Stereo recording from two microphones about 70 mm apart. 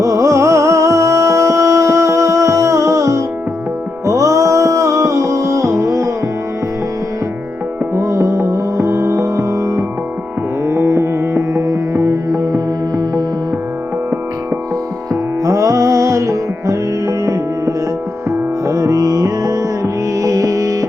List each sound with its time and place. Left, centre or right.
0.0 s music: right
7.9 s music: right
11.5 s music: right
15.1 s music: right